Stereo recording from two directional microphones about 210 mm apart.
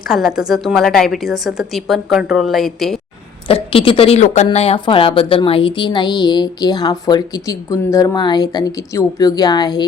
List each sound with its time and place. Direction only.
0.1 s a woman's voice: 5° right (ahead or behind)
3.4 s a woman's voice: 25° left (ahead or behind)